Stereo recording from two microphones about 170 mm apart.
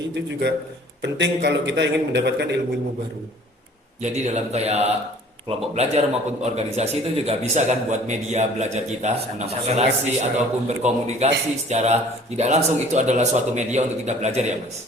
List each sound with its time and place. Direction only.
0.1 s a man's voice: 90° right
4.0 s a man's voice: 45° right (ahead or behind)